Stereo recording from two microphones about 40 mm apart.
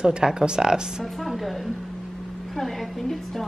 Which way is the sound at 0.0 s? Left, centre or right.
Centre.